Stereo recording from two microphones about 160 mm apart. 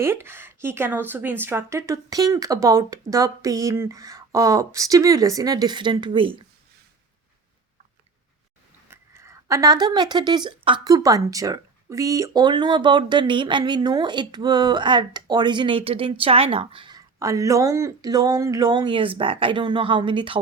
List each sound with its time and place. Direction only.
0.0 s speech: 15° right (ahead or behind); by 6.4 s 35° right (ahead or behind)
8.9 s speech: 15° right (ahead or behind); by 17.0 s 30° right (ahead or behind)
17.2 s speech: 20° right (ahead or behind)